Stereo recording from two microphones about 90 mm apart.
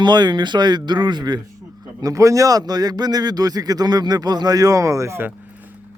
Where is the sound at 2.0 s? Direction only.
35° right (ahead or behind).